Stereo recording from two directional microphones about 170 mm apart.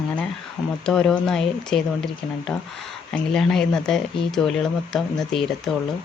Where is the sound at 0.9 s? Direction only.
5° left (ahead or behind).